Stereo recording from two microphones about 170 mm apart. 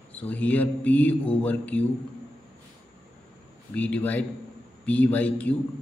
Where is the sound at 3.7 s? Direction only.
10° left (ahead or behind).